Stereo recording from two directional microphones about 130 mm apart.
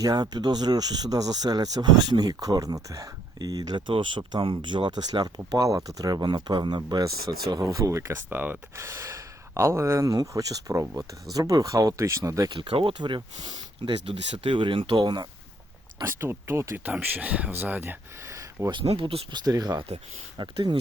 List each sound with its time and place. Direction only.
0.0 s speech: 30° right (ahead or behind)
12.5 s speech: 45° right (ahead or behind)
16.0 s speech: 20° right (ahead or behind)
18.9 s speech: 45° right (ahead or behind)
19.5 s speech: 30° right (ahead or behind)